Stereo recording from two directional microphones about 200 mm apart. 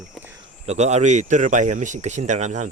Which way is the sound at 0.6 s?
35° right (ahead or behind).